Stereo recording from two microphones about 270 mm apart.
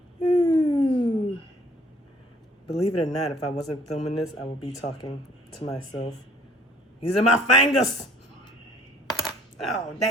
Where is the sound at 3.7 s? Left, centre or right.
Centre.